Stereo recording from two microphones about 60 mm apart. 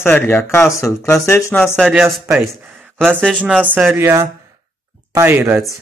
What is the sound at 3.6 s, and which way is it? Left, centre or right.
Speech, right.